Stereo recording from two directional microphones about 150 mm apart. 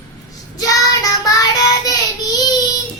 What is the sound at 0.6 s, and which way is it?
Child singing, 25° left (ahead or behind).